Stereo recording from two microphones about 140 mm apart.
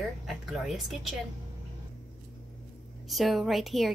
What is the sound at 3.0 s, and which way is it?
Speech, centre (ahead or behind).